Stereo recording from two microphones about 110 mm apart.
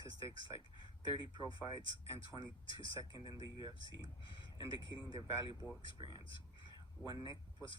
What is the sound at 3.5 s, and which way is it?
Speech, 45° left (ahead or behind).